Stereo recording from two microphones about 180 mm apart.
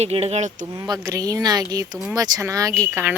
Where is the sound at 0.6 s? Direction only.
20° right (ahead or behind).